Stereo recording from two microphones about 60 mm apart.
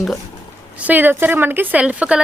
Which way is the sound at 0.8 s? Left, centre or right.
Right.